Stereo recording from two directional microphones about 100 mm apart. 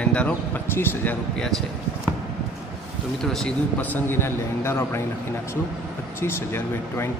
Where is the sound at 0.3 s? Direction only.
25° left (ahead or behind).